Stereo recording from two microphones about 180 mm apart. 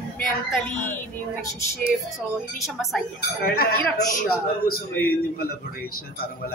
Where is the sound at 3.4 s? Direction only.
60° left (ahead or behind).